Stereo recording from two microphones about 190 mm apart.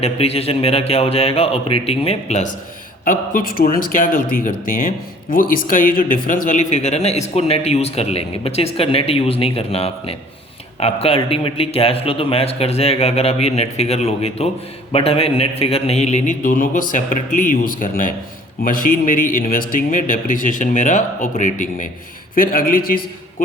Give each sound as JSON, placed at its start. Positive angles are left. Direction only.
{"t": 0.0, "sound": "speech", "side_deg": 30}
{"t": 3.0, "sound": "speech", "side_deg": 45}